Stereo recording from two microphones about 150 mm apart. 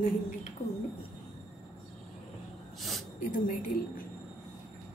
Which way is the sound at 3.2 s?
60° left (ahead or behind).